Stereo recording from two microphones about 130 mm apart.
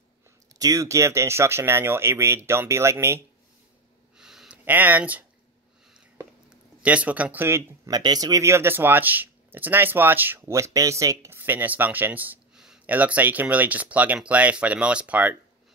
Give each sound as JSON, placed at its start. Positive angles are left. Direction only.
{"t": 0.6, "sound": "speech", "side_deg": -25}
{"t": 4.2, "sound": "a sound", "side_deg": -5}
{"t": 4.6, "sound": "speech", "side_deg": -15}
{"t": 6.8, "sound": "speech", "side_deg": -10}